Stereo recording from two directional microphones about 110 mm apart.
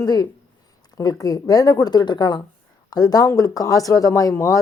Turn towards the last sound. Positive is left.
turn(degrees=30)  # may be behind; listen again after turning